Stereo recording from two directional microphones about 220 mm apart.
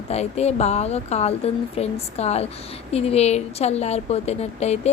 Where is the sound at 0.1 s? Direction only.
30° left (ahead or behind).